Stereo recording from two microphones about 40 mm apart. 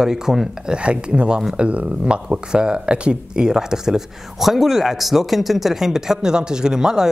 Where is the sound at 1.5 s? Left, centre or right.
Right.